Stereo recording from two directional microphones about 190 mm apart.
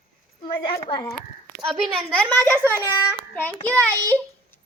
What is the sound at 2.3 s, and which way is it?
Speech, 10° left (ahead or behind).